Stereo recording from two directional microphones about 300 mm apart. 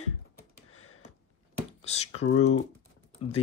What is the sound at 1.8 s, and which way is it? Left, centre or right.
Speech, left.